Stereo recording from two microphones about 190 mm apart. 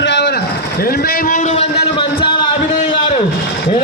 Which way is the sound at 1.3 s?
35° left (ahead or behind).